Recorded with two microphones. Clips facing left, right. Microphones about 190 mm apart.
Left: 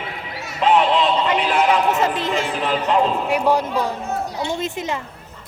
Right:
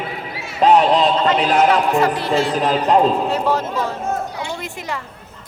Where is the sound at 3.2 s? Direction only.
15° left (ahead or behind).